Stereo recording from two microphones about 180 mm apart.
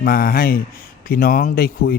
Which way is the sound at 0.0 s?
55° left (ahead or behind).